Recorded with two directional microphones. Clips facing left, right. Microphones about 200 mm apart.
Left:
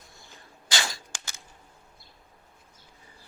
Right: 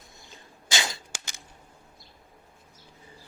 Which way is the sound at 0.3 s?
20° right (ahead or behind).